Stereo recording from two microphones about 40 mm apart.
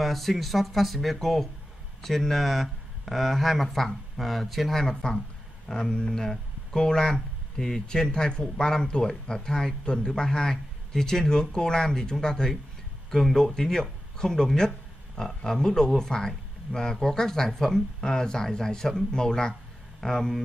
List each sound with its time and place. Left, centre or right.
0.0 s speech: centre